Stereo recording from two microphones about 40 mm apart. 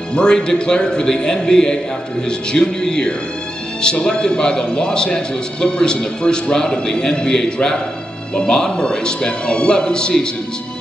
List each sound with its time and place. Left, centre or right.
0.1 s a man's voice: left